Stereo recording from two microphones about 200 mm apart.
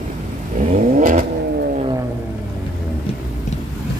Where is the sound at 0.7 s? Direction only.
40° right (ahead or behind).